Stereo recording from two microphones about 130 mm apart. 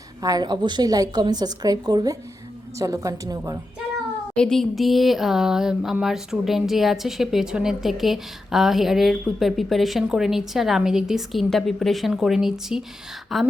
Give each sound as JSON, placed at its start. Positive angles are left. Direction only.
{"t": 0.2, "sound": "a woman's voice", "side_deg": -30}
{"t": 4.4, "sound": "speech", "side_deg": 5}